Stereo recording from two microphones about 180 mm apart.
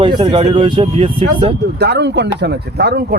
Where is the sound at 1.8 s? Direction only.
70° right (ahead or behind).